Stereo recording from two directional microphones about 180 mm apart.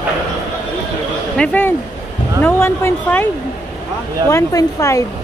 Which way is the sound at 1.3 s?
10° left (ahead or behind).